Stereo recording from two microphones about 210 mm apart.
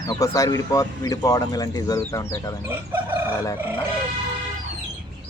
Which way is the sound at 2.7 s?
10° right (ahead or behind).